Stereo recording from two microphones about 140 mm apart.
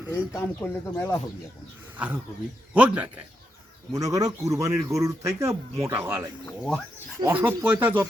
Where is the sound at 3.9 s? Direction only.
25° right (ahead or behind).